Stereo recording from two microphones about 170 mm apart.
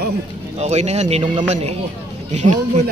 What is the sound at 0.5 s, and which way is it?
Speech, 40° right (ahead or behind).